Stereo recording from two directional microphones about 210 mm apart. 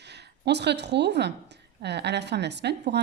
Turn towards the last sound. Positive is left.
turn(degrees=-55)  # may be behind; listen again after turning